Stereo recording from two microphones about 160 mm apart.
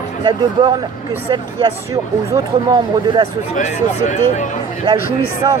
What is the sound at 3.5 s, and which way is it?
Speech, 50° left (ahead or behind).